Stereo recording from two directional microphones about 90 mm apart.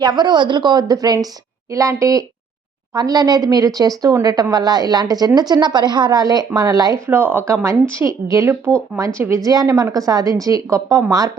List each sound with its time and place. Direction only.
0.0 s a woman's voice: 50° right (ahead or behind)
7.1 s a woman's voice: 20° right (ahead or behind); by 11.0 s 35° right (ahead or behind)